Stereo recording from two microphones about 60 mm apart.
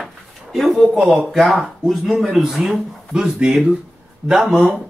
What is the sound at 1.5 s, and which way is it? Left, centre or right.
Speech, centre.